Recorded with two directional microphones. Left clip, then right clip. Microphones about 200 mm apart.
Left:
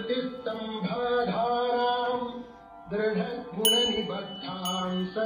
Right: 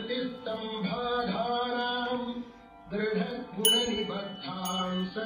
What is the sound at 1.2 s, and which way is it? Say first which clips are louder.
Music: left 4 dB; 25° left (ahead or behind).